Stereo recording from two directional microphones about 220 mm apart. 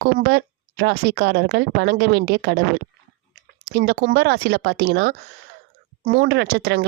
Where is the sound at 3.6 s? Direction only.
50° right (ahead or behind).